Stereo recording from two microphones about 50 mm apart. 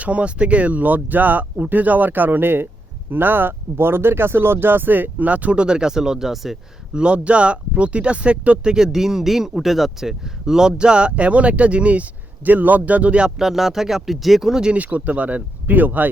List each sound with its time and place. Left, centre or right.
0.0 s speech: right; by 6.6 s centre
6.9 s speech: right
8.7 s speech: centre
13.4 s speech: centre
14.8 s speech: right